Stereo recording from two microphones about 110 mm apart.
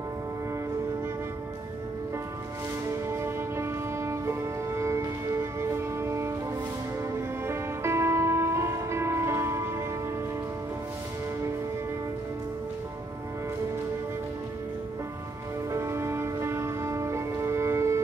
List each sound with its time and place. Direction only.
3.1 s music: 25° right (ahead or behind)
15.7 s music: 25° right (ahead or behind)